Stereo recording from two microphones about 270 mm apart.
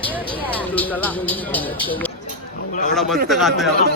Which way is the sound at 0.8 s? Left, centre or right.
Centre.